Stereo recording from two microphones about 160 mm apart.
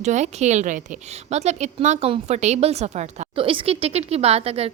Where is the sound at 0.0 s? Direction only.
45° right (ahead or behind).